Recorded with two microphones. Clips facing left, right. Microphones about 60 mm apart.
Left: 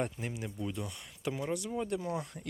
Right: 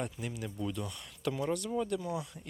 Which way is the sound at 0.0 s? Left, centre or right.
Left.